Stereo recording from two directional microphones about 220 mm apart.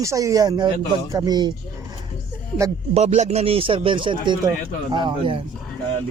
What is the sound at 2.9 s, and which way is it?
A man's voice, 30° right (ahead or behind).